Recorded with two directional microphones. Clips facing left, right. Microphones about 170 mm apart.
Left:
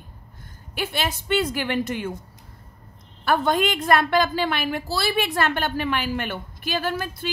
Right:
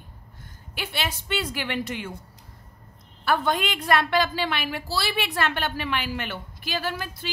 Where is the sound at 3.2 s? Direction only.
45° left (ahead or behind).